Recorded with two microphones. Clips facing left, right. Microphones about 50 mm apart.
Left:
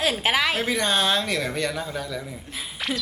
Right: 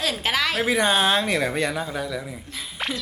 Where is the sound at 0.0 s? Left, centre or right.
Centre.